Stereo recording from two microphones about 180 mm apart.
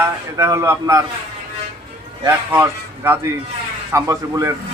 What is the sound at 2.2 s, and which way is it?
A man's voice, 15° right (ahead or behind).